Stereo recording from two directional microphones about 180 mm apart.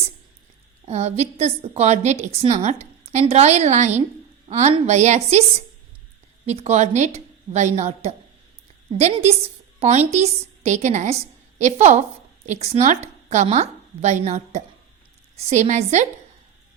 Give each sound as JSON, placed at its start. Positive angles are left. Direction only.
{"t": 0.9, "sound": "a woman's voice", "side_deg": -35}